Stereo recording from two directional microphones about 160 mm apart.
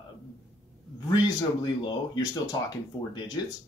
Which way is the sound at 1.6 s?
25° left (ahead or behind).